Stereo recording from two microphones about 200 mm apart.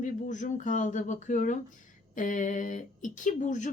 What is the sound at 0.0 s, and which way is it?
Speech, 40° left (ahead or behind).